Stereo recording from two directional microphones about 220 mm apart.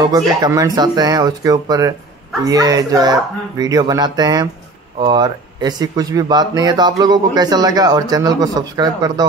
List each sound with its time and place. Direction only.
0.0 s a man's voice: 15° right (ahead or behind)